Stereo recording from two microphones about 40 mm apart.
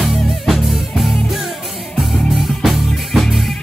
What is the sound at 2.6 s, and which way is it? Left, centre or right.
Music, centre.